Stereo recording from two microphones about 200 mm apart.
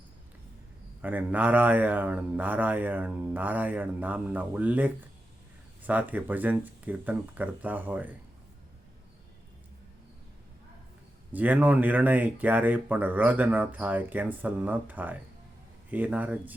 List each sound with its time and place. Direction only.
1.0 s speech: 10° right (ahead or behind)
11.3 s speech: 10° right (ahead or behind)